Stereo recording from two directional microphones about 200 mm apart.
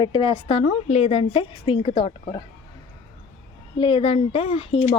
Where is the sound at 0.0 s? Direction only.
25° left (ahead or behind).